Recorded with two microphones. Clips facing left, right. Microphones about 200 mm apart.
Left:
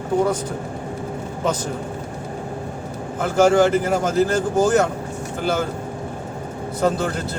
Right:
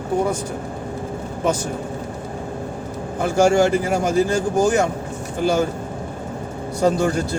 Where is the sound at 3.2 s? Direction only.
15° right (ahead or behind).